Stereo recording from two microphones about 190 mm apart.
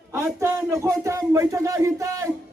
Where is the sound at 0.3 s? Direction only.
15° right (ahead or behind).